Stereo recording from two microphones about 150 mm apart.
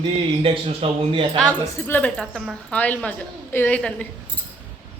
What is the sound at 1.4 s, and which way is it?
Speech, 10° left (ahead or behind).